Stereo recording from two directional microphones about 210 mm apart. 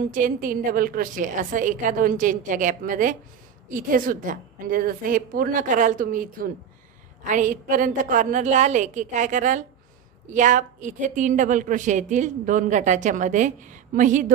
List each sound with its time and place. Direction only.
0.1 s a woman's voice: 40° right (ahead or behind)